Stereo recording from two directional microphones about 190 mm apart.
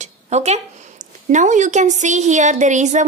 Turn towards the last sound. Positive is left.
turn(degrees=-40)  # may be behind; listen again after turning